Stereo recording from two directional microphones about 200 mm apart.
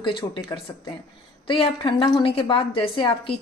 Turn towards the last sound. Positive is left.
turn(degrees=25)  # may be behind; listen again after turning